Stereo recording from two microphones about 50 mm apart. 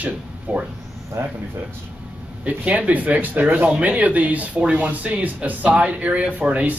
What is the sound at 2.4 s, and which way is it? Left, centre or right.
A man's voice, right.